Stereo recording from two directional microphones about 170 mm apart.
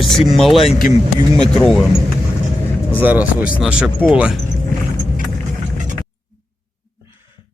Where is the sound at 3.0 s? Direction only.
10° right (ahead or behind).